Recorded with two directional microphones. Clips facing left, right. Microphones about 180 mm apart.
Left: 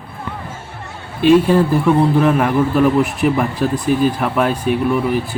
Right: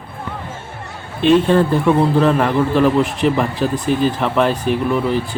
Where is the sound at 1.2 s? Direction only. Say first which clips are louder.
Left 1 dB; 5° left (ahead or behind).